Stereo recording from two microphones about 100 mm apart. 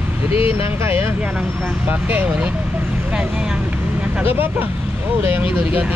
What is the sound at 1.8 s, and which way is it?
Speech, 15° right (ahead or behind).